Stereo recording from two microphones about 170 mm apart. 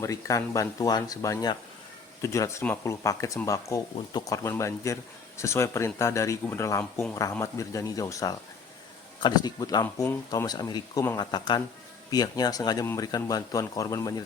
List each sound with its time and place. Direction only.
0.0 s speech: 20° left (ahead or behind)